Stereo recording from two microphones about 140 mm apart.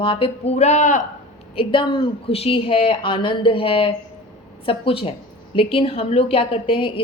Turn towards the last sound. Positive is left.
turn(degrees=40)  # may be behind; listen again after turning